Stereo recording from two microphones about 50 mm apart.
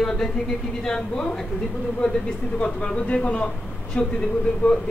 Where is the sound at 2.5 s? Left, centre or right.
Left.